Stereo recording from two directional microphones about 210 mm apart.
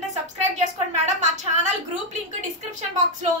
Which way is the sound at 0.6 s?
35° right (ahead or behind).